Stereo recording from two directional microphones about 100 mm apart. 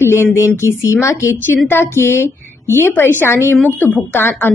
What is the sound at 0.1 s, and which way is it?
Speech, 25° left (ahead or behind).